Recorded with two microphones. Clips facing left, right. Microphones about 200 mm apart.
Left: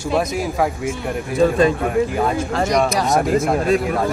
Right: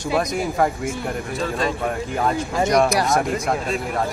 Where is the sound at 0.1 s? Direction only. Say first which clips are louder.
Left 2 dB; 5° left (ahead or behind).